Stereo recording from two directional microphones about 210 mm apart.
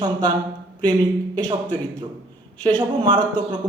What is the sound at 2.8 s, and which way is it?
Speech, 20° right (ahead or behind).